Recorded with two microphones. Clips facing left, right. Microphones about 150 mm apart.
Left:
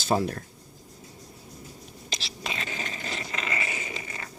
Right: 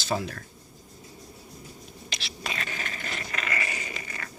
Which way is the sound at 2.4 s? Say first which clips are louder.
Even; 20° left (ahead or behind).